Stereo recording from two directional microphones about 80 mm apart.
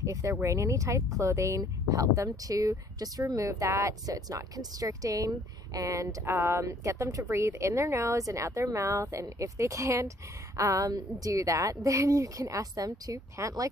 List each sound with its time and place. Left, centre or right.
0.0 s a woman's voice: right
4.0 s speech: right
6.2 s a woman's voice: right